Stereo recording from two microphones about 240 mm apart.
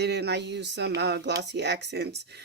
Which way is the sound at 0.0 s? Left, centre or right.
Right.